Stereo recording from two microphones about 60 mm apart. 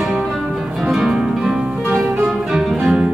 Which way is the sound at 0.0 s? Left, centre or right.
Right.